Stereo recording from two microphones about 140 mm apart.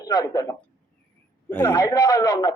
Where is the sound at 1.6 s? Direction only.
30° left (ahead or behind).